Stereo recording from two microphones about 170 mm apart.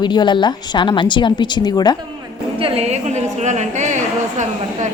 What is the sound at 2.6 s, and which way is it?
A woman's voice, 40° right (ahead or behind).